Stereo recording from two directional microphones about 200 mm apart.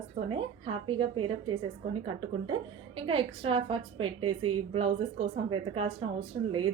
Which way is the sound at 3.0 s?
25° right (ahead or behind).